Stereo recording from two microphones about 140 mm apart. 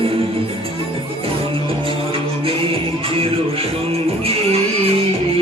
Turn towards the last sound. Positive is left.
turn(degrees=-45)  # may be behind; listen again after turning